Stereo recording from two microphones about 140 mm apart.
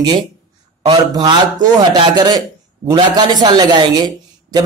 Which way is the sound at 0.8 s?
30° right (ahead or behind).